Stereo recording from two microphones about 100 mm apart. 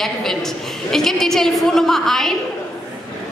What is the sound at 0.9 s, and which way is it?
A woman's voice, 5° left (ahead or behind).